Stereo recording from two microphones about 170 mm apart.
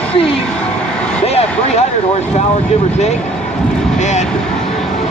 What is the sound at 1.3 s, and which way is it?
Speech, 40° left (ahead or behind).